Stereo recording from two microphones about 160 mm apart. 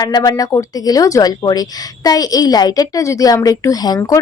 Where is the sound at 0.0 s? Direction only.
25° left (ahead or behind).